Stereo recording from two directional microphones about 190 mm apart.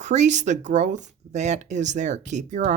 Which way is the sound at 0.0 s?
40° right (ahead or behind).